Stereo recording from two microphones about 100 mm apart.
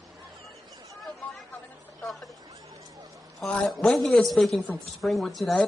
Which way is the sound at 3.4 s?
Centre (ahead or behind).